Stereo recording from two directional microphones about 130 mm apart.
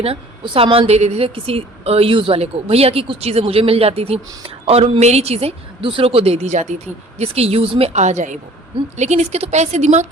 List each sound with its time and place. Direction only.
0.0 s a woman's voice: 45° right (ahead or behind)